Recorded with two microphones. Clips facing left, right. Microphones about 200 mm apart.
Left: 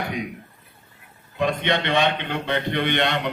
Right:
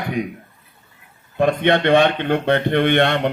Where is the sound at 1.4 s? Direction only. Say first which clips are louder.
Right 6 dB; 55° right (ahead or behind).